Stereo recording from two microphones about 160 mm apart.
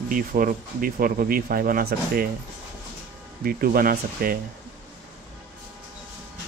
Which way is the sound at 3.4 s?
65° right (ahead or behind).